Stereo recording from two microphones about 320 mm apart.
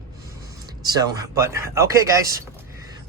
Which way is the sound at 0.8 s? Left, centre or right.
Centre.